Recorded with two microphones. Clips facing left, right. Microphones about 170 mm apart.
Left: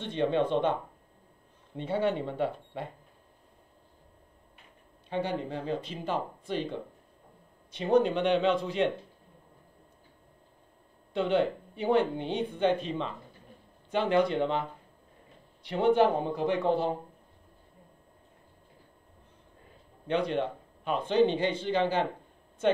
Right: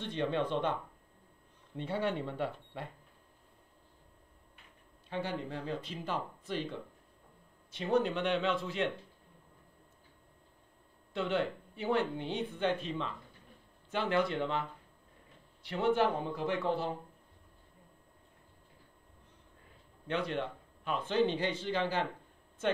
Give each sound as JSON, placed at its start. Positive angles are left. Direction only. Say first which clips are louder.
{"t": 0.0, "sound": "speech", "louder": "left 6 dB", "side_deg": 20}
{"t": 5.1, "sound": "speech", "louder": "left 5 dB", "side_deg": 20}
{"t": 11.1, "sound": "speech", "louder": "left 6 dB", "side_deg": 25}
{"t": 20.1, "sound": "a man's voice", "louder": "left 6 dB", "side_deg": 20}